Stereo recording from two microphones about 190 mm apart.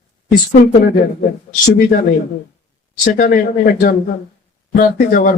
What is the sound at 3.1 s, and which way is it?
Speech, 45° left (ahead or behind).